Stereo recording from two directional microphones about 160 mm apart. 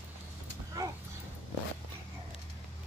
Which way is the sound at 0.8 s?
20° right (ahead or behind).